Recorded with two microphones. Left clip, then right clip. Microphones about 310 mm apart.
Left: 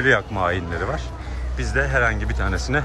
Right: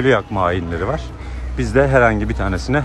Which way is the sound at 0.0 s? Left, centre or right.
Centre.